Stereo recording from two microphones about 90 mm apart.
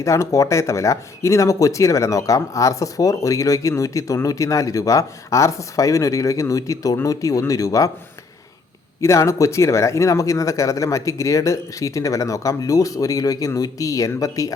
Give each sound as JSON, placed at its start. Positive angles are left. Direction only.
{"t": 0.0, "sound": "speech", "side_deg": 35}
{"t": 9.0, "sound": "speech", "side_deg": 35}